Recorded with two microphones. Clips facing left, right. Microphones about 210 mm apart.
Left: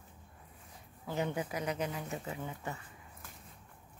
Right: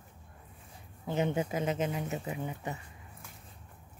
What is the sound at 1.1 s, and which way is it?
Speech, 20° right (ahead or behind).